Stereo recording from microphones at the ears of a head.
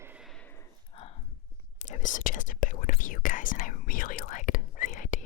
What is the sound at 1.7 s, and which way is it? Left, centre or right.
Whispering, left.